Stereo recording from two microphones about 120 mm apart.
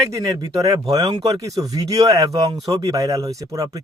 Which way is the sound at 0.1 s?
30° right (ahead or behind).